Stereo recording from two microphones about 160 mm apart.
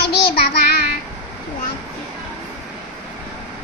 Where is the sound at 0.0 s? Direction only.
85° left.